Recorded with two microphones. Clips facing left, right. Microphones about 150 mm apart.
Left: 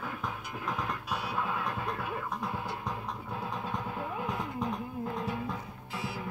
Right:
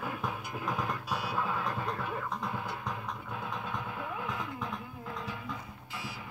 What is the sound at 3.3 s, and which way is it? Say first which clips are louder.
Vehicle: left 2 dB; 35° left (ahead or behind).